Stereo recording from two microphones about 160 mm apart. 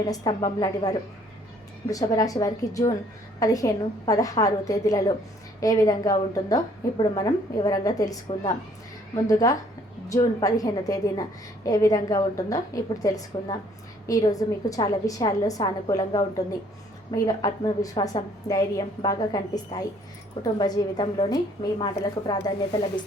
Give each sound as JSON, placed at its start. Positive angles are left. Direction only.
{"t": 0.1, "sound": "a woman's voice", "side_deg": 25}
{"t": 9.2, "sound": "a woman's voice", "side_deg": 20}